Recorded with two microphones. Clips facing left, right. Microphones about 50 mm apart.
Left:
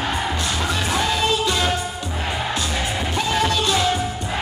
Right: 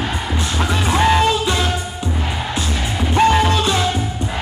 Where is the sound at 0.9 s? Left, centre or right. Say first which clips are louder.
Right 9 dB; right.